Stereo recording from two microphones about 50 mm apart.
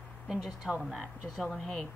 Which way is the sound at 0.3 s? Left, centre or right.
Centre.